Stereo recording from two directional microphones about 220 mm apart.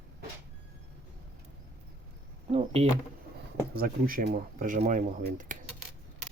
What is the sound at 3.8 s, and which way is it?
Speech, 40° right (ahead or behind).